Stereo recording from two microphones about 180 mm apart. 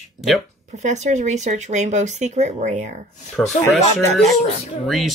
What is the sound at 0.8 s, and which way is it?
Speech, 40° right (ahead or behind).